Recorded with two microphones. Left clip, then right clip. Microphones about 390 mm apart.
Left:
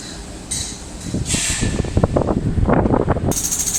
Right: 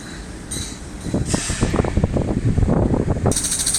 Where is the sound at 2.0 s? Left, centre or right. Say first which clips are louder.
Left 5 dB; left.